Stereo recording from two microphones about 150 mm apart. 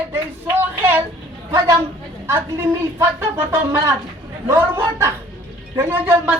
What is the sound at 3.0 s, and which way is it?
A woman's voice, 15° right (ahead or behind).